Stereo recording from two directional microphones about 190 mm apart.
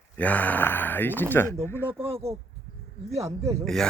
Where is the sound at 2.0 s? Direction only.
30° right (ahead or behind).